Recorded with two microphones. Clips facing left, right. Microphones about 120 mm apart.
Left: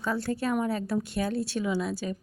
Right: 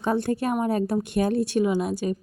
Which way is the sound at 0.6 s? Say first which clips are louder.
Right 4 dB; 45° right (ahead or behind).